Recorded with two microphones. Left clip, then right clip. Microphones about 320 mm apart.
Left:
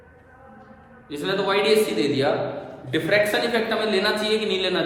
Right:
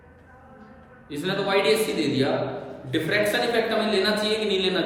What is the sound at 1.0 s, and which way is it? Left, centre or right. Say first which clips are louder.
A man's voice: left 3 dB; centre.